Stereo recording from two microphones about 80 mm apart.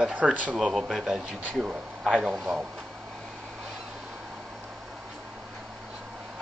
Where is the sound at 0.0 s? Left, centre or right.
Centre.